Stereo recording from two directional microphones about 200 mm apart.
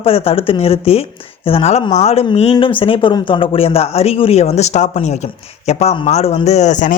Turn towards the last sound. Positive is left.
turn(degrees=40)  # may be behind; listen again after turning